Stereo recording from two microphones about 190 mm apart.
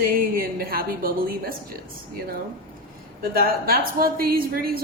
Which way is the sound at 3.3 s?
50° right (ahead or behind).